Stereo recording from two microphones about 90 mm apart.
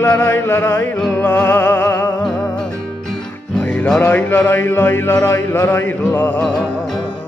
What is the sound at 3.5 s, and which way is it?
Music, 15° left (ahead or behind).